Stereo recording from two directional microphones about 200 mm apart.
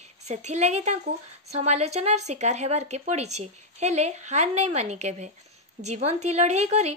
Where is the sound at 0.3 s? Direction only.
35° right (ahead or behind).